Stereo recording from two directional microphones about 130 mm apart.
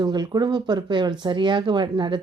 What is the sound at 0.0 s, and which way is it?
Speech, 35° right (ahead or behind).